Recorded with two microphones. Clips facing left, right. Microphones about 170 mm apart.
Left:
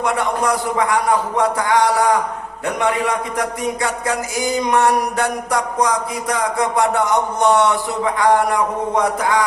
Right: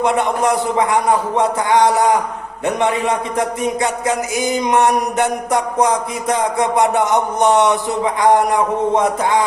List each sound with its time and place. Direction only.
0.0 s music: 25° right (ahead or behind)
3.3 s music: 20° right (ahead or behind)